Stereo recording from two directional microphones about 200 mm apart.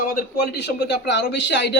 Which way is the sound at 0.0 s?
45° left (ahead or behind).